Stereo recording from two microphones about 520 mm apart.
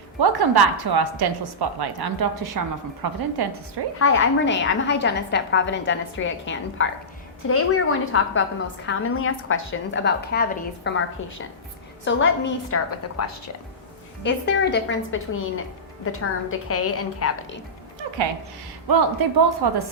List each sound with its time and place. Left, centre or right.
0.2 s a woman's voice: right
3.9 s a woman's voice: left
18.9 s a woman's voice: right